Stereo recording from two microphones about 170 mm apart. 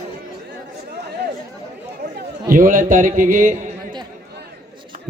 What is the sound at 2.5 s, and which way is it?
A man's voice, 50° right (ahead or behind).